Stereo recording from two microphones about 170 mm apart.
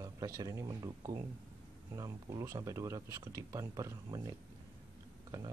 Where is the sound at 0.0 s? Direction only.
20° right (ahead or behind).